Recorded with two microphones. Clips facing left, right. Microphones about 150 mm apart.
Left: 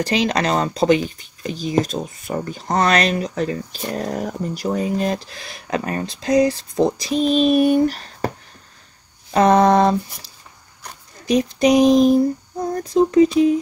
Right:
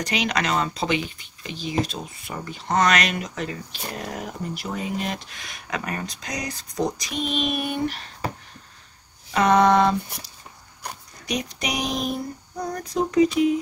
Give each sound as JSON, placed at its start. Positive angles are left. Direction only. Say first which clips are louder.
{"t": 0.0, "sound": "speech", "louder": "left 6 dB", "side_deg": 35}
{"t": 9.3, "sound": "speech", "louder": "left 4 dB", "side_deg": 35}